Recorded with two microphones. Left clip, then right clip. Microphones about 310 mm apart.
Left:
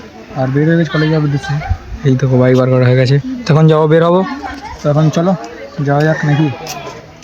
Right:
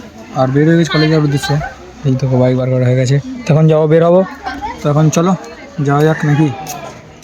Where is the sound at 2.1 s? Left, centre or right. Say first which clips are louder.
Left 2 dB; centre.